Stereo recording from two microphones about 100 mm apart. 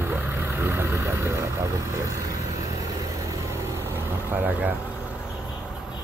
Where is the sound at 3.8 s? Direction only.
20° right (ahead or behind).